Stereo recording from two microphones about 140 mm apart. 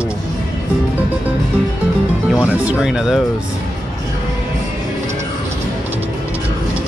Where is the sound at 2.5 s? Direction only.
10° right (ahead or behind).